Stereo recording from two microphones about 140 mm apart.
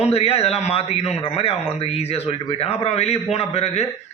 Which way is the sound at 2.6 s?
45° left (ahead or behind).